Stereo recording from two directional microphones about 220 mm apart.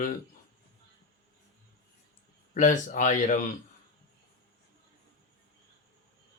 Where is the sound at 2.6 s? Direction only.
35° left (ahead or behind).